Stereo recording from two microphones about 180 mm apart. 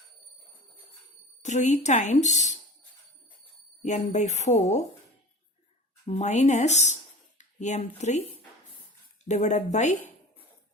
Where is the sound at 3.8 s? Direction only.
40° left (ahead or behind).